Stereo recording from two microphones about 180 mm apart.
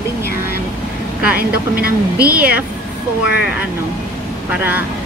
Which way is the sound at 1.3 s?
55° right (ahead or behind).